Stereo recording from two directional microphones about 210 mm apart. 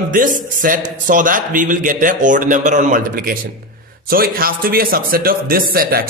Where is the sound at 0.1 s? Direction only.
40° right (ahead or behind).